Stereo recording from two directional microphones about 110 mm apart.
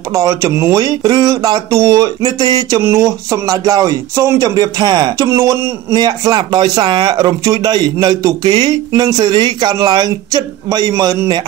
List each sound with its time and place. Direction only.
0.1 s speech: 30° right (ahead or behind)
6.0 s speech: 40° right (ahead or behind)